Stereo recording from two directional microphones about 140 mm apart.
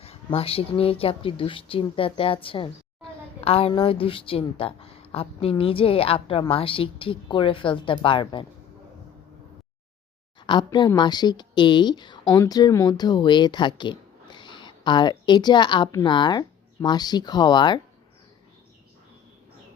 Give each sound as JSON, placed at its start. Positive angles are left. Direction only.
{"t": 0.0, "sound": "a woman's voice", "side_deg": 45}
{"t": 10.4, "sound": "a woman's voice", "side_deg": 35}